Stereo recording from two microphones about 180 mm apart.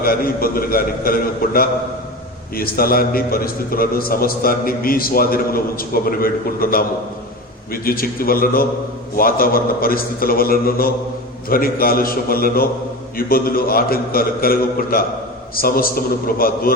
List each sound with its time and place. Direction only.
0.0 s a man's voice: 55° left (ahead or behind)